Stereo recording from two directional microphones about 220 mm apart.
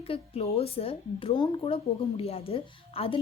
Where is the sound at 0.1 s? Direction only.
25° left (ahead or behind).